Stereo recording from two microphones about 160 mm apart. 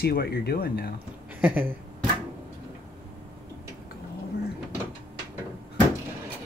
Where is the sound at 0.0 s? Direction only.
80° left.